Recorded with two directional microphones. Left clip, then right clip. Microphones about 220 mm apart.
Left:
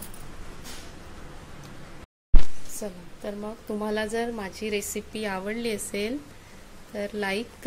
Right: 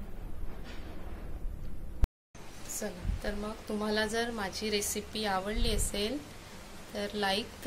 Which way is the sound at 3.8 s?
35° left (ahead or behind).